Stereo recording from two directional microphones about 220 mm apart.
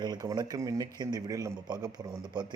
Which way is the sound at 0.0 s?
15° right (ahead or behind).